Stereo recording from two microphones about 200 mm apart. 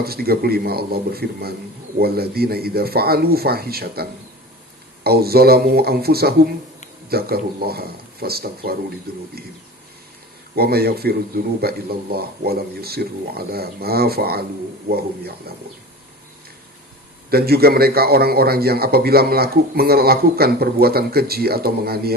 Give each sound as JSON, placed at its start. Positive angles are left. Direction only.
{"t": 0.0, "sound": "a man's voice", "side_deg": -50}
{"t": 10.5, "sound": "a man's voice", "side_deg": -50}
{"t": 17.2, "sound": "a man's voice", "side_deg": -50}